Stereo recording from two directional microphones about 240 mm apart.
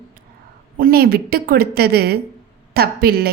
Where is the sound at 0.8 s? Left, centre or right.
Right.